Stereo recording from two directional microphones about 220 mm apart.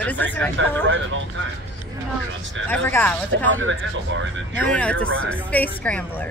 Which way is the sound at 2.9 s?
10° left (ahead or behind).